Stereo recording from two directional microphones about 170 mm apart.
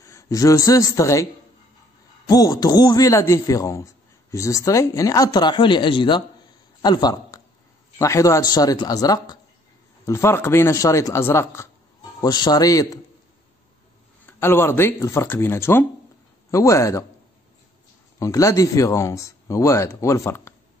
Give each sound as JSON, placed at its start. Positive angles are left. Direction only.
{"t": 0.0, "sound": "a man's voice", "side_deg": 20}
{"t": 14.2, "sound": "speech", "side_deg": 15}
{"t": 18.2, "sound": "speech", "side_deg": 20}